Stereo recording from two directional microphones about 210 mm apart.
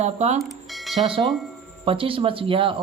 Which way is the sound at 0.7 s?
Centre (ahead or behind).